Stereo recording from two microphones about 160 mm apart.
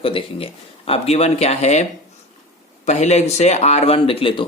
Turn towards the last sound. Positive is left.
turn(degrees=35)  # may be behind; listen again after turning